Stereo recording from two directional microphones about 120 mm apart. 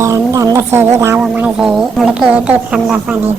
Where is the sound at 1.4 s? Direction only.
5° right (ahead or behind).